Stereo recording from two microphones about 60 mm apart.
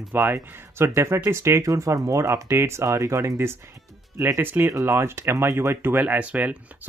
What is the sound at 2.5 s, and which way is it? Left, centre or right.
Speech, right.